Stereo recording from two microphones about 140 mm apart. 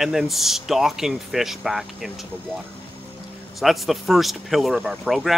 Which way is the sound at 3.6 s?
Centre (ahead or behind).